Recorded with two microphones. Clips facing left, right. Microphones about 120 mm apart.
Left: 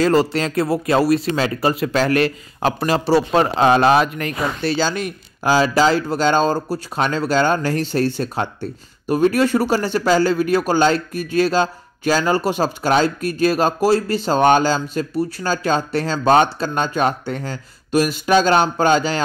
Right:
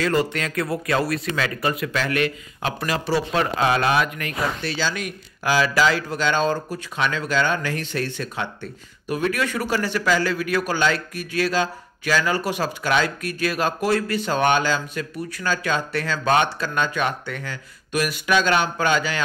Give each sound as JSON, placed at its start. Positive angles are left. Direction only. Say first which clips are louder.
{"t": 0.0, "sound": "speech", "louder": "left 6 dB", "side_deg": 35}